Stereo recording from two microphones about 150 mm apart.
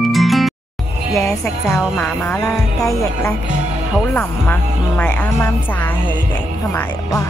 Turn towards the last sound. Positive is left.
turn(degrees=20)  # may be behind; listen again after turning